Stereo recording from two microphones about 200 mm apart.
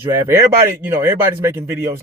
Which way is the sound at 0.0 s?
15° right (ahead or behind).